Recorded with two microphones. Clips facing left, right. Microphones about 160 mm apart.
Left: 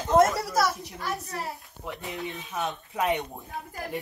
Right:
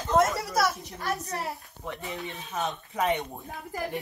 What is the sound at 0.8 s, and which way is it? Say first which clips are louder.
Speech: right 1 dB; 40° right (ahead or behind).